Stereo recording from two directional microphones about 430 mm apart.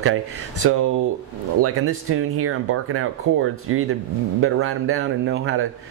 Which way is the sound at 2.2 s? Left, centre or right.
Right.